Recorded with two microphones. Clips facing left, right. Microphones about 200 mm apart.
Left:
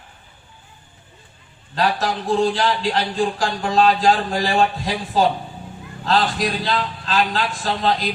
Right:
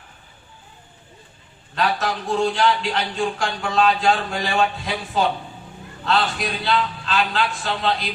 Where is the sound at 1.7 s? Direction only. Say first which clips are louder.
Left 2 dB; 35° left (ahead or behind).